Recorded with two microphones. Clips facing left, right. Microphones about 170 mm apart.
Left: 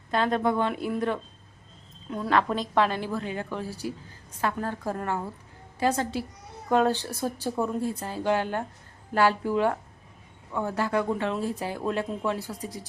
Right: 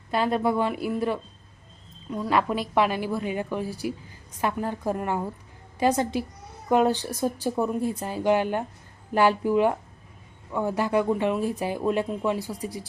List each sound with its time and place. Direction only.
0.1 s a woman's voice: 5° right (ahead or behind)